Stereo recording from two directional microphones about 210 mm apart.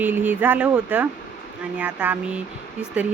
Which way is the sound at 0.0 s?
10° right (ahead or behind).